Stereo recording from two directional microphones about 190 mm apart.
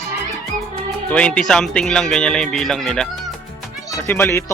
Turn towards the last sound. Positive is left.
turn(degrees=10)  # may be behind; listen again after turning